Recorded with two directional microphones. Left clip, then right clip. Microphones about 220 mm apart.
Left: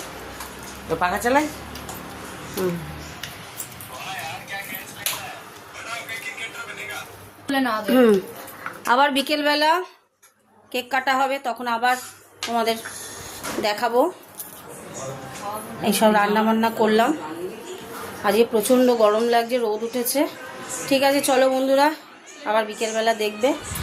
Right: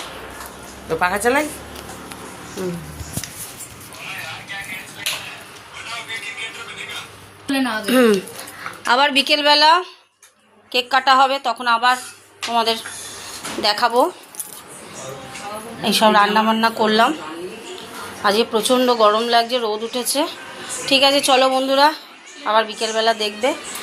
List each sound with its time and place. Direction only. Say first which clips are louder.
0.9 s a woman's voice: right 3 dB; 30° right (ahead or behind)
7.4 s a woman's voice: right 1 dB; 5° left (ahead or behind)
8.8 s a woman's voice: right 3 dB; 10° left (ahead or behind)
15.8 s a woman's voice: right 4 dB; 5° left (ahead or behind)
18.2 s a woman's voice: right 2 dB; 5° left (ahead or behind)